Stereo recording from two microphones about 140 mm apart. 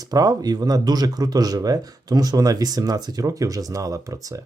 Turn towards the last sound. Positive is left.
turn(degrees=-25)  # may be behind; listen again after turning